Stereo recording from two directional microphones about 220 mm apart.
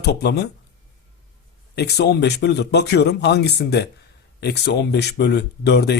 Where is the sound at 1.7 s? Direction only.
50° left (ahead or behind).